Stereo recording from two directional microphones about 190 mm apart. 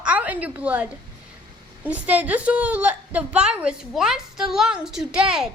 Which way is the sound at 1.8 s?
5° right (ahead or behind).